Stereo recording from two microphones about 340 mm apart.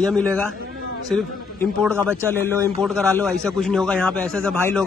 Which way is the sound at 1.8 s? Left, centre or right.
Centre.